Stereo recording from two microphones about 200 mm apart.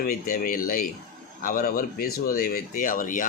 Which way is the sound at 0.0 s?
45° left (ahead or behind).